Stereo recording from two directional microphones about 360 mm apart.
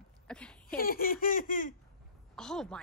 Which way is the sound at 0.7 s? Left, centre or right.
Left.